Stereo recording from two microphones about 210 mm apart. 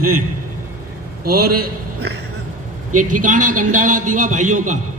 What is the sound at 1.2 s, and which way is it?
Speech, 45° right (ahead or behind).